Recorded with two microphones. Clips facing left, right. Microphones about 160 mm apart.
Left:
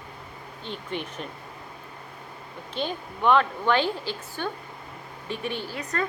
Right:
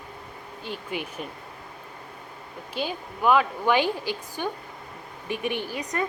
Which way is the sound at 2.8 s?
5° right (ahead or behind).